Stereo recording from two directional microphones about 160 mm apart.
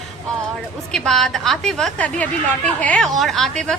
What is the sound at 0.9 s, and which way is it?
A woman's voice, 5° left (ahead or behind).